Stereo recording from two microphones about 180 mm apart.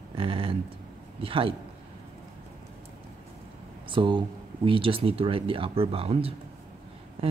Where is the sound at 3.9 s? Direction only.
25° right (ahead or behind).